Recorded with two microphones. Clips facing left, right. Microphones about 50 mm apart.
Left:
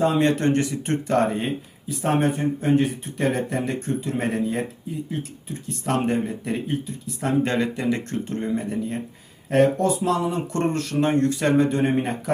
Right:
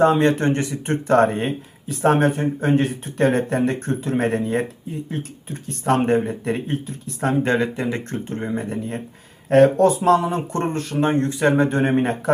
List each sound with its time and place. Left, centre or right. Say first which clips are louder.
0.0 s speech: right 3 dB; right
7.2 s speech: right 3 dB; right
9.5 s speech: right 5 dB; right